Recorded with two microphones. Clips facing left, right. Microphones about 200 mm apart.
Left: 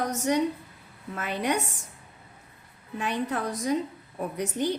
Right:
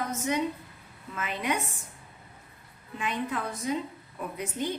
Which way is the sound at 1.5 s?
80° left.